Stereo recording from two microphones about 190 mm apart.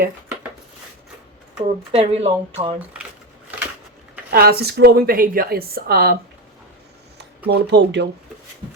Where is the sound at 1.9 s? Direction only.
35° right (ahead or behind).